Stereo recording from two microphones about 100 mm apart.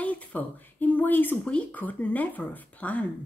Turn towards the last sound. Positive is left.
turn(degrees=15)  # may be behind; listen again after turning